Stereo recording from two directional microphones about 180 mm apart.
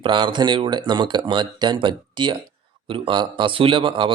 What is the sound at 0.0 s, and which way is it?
Speech, 25° right (ahead or behind).